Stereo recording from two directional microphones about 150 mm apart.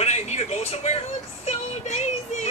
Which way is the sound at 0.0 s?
45° left (ahead or behind).